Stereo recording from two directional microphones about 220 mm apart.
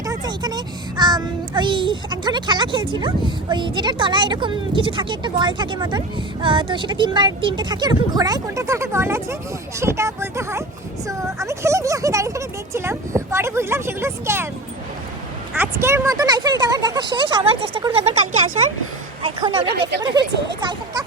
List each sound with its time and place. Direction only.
0.0 s a child's voice: 15° right (ahead or behind)
15.5 s speech: 10° right (ahead or behind)
19.2 s speech: 25° right (ahead or behind)
19.7 s speech: 50° right (ahead or behind)
20.6 s speech: 20° right (ahead or behind)